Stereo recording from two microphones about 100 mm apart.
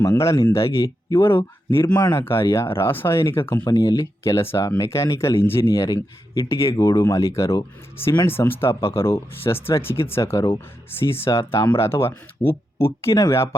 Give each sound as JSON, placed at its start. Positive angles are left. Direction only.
{"t": 0.0, "sound": "speech", "side_deg": 30}
{"t": 3.5, "sound": "speech", "side_deg": 40}
{"t": 3.9, "sound": "speech", "side_deg": 25}